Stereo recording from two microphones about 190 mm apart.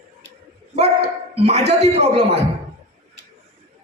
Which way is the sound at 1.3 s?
35° right (ahead or behind).